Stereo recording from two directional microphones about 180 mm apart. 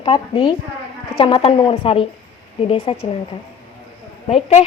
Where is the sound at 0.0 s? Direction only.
30° left (ahead or behind).